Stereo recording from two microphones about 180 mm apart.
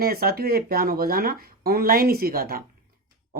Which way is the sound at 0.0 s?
55° right (ahead or behind).